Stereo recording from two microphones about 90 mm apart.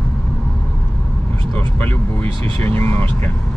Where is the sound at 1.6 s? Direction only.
20° left (ahead or behind).